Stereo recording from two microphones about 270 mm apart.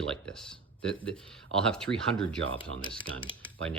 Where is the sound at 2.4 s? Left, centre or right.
Right.